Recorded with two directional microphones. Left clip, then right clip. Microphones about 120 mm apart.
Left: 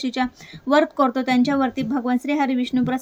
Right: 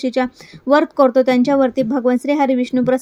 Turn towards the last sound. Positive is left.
turn(degrees=-35)  # may be behind; listen again after turning